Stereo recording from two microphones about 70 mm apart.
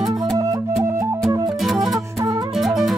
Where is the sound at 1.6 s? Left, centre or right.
Centre.